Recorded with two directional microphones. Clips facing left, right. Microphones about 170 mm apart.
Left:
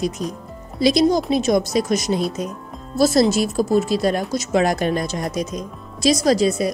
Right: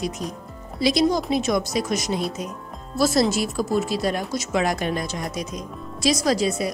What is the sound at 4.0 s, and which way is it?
A woman's voice, 35° left (ahead or behind).